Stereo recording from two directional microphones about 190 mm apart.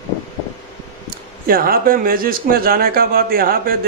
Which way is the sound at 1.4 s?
50° right (ahead or behind).